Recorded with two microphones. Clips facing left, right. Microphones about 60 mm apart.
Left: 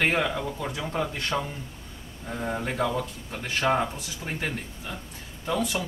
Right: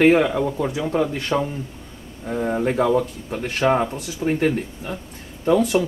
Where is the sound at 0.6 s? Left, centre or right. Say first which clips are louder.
Right 8 dB; centre.